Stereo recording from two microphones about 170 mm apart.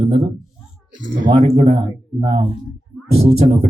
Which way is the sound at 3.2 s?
35° right (ahead or behind).